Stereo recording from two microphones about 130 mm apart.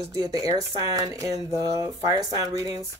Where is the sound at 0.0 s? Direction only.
25° right (ahead or behind).